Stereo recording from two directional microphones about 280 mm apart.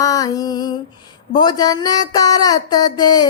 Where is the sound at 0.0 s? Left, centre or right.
Centre.